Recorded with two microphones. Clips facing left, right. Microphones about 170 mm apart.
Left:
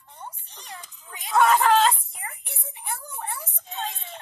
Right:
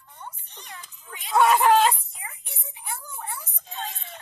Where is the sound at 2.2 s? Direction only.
50° left (ahead or behind).